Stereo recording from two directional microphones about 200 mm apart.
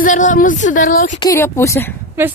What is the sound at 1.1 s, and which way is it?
Speech, 15° left (ahead or behind).